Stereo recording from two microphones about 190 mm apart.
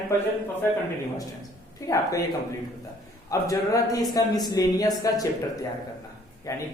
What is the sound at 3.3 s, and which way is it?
A man's voice, 15° left (ahead or behind).